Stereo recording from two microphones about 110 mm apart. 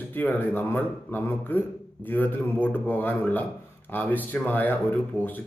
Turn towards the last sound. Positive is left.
turn(degrees=15)  # may be behind; listen again after turning